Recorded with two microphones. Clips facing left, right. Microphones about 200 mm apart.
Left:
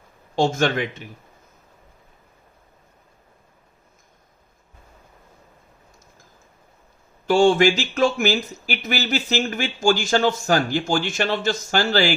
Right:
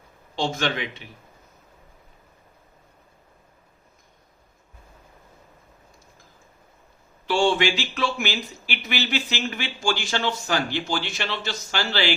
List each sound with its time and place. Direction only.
0.3 s speech: 45° left (ahead or behind)
7.3 s speech: 45° left (ahead or behind)